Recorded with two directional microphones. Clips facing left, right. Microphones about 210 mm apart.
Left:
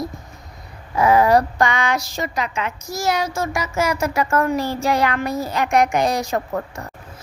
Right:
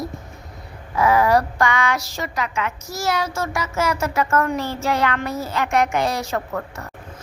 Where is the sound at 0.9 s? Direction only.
20° left (ahead or behind).